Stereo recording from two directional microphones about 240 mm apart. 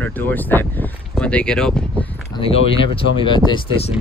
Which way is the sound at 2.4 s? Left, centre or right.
Left.